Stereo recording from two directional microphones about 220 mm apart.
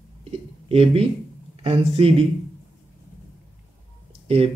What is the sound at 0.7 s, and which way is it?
Speech, 25° right (ahead or behind).